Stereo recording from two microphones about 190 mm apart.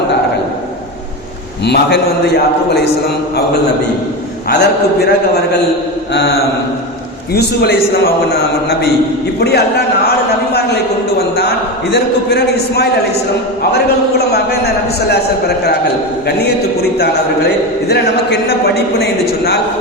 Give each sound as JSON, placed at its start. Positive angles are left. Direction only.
{"t": 1.6, "sound": "a man's voice", "side_deg": 60}
{"t": 4.4, "sound": "a man's voice", "side_deg": 60}
{"t": 7.3, "sound": "a man's voice", "side_deg": 55}
{"t": 9.4, "sound": "a man's voice", "side_deg": 60}
{"t": 11.3, "sound": "a man's voice", "side_deg": 60}